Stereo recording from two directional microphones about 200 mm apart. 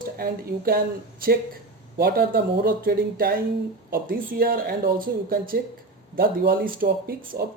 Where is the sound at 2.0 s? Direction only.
50° right (ahead or behind).